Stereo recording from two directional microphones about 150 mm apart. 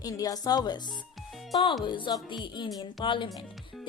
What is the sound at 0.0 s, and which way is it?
Speech, 25° left (ahead or behind).